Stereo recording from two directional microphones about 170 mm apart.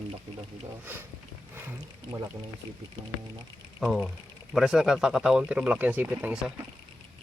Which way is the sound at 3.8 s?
Centre (ahead or behind).